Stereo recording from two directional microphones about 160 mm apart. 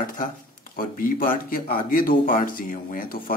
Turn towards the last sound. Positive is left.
turn(degrees=60)  # may be behind; listen again after turning